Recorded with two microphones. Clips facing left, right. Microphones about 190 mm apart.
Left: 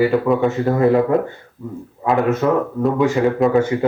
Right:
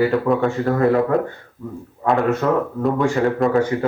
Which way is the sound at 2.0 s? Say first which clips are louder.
Even; 20° left (ahead or behind).